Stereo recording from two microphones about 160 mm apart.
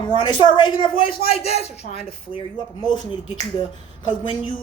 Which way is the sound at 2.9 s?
25° left (ahead or behind).